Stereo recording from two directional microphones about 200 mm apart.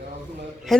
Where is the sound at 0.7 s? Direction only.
Centre (ahead or behind).